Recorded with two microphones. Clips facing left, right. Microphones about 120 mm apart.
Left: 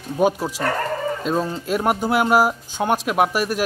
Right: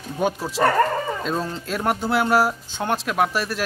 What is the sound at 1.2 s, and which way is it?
Speech, 5° left (ahead or behind).